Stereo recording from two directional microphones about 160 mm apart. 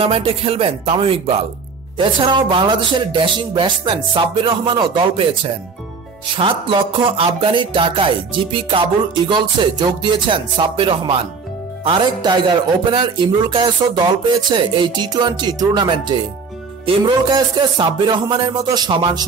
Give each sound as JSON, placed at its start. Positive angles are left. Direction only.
{"t": 0.0, "sound": "music", "side_deg": -35}
{"t": 11.8, "sound": "speech", "side_deg": -30}